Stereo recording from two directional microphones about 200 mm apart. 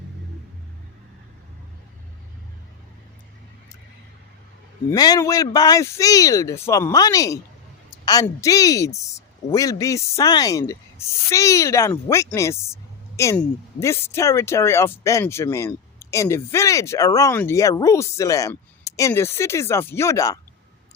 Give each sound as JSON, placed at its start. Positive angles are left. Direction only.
{"t": 4.9, "sound": "a woman's voice", "side_deg": 20}